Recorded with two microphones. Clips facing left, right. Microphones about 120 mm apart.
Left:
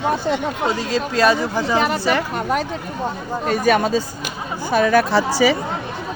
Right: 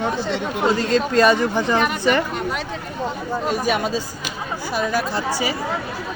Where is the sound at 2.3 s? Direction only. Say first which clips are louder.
Left 4 dB; 45° left (ahead or behind).